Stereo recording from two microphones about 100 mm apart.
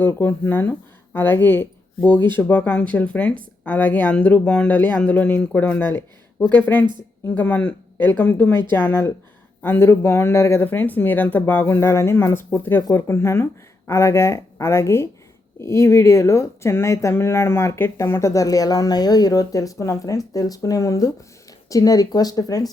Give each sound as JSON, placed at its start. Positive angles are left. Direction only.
{"t": 0.0, "sound": "speech", "side_deg": 25}